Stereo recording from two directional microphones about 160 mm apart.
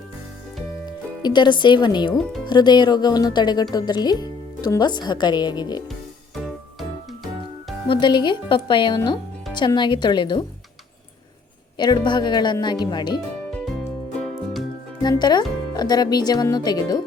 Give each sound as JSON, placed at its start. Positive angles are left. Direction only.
{"t": 0.9, "sound": "a woman's voice", "side_deg": 25}
{"t": 6.3, "sound": "music", "side_deg": 0}
{"t": 7.9, "sound": "a woman's voice", "side_deg": 30}
{"t": 11.8, "sound": "a woman's voice", "side_deg": 25}
{"t": 15.0, "sound": "a woman's voice", "side_deg": 25}